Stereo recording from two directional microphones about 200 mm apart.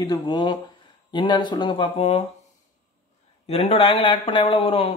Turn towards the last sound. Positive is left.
turn(degrees=25)  # may be behind; listen again after turning